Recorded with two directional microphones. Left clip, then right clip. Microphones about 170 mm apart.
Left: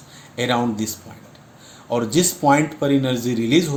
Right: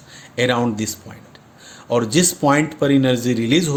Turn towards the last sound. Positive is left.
turn(degrees=-65)  # may be behind; listen again after turning